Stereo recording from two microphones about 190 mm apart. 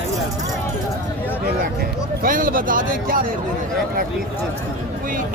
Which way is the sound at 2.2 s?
45° right (ahead or behind).